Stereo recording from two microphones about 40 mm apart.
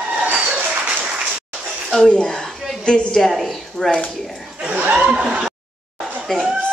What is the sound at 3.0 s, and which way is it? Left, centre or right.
Speech, centre.